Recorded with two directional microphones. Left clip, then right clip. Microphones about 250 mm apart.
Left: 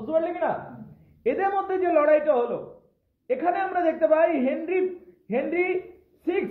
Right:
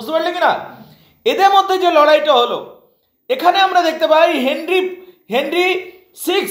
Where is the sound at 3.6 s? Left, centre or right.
Right.